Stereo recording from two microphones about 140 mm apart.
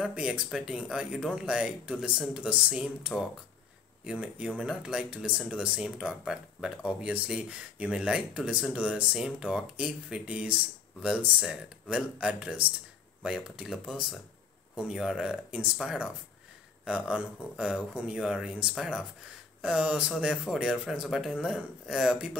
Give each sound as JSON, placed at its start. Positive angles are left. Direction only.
{"t": 0.0, "sound": "speech", "side_deg": -5}